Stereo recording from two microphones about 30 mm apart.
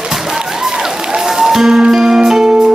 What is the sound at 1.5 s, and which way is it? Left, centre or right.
Music, centre.